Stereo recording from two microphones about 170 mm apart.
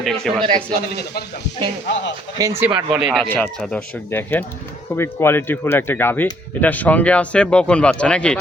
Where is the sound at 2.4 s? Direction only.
15° right (ahead or behind).